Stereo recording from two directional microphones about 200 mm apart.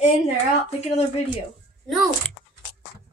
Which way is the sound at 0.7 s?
35° left (ahead or behind).